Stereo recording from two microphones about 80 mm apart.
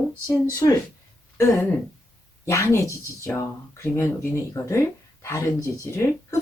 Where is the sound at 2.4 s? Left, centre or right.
Left.